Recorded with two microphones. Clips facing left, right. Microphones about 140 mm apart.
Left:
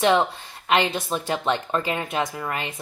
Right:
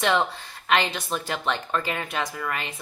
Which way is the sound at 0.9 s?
20° left (ahead or behind).